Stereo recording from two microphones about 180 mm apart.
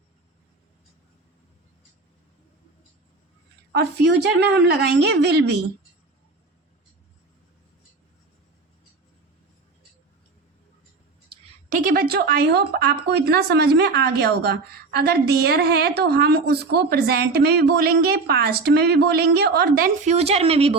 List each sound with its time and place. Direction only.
3.7 s a woman's voice: 70° right (ahead or behind)
11.7 s speech: 50° right (ahead or behind)
20.1 s a woman's voice: 35° right (ahead or behind)